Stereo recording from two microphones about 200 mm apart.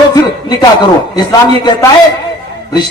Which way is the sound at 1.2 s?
20° left (ahead or behind).